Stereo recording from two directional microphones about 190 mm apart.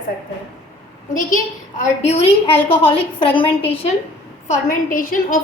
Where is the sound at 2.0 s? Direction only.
35° left (ahead or behind).